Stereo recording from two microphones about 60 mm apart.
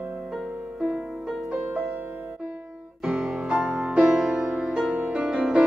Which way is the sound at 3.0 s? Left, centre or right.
Centre.